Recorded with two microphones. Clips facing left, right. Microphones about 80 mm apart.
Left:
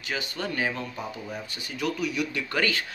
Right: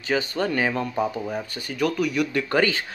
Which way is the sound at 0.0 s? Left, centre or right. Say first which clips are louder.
Right 8 dB; right.